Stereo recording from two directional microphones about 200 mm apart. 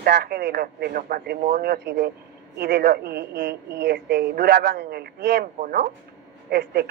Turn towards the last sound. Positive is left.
turn(degrees=-55)  # may be behind; listen again after turning